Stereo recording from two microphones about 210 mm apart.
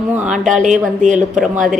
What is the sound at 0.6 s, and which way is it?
Speech, 35° right (ahead or behind).